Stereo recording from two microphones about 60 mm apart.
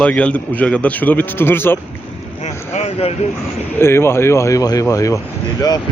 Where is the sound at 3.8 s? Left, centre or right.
Left.